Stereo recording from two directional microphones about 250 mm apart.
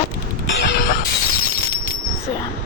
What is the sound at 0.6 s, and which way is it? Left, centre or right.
Mechanisms, left.